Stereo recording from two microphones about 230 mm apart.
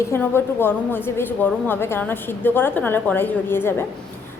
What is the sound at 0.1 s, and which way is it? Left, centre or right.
A woman's voice, centre.